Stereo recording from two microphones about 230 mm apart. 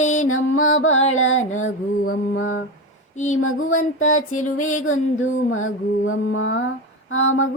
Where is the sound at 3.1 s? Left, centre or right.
Left.